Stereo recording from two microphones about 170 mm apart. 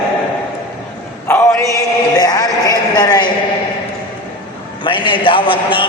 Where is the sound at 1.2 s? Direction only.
10° left (ahead or behind).